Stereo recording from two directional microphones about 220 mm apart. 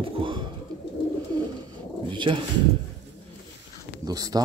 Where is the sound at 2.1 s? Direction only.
20° right (ahead or behind).